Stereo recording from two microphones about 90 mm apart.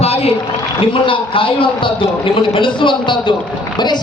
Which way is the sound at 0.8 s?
80° left.